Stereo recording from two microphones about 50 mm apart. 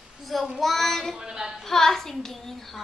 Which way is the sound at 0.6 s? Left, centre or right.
Centre.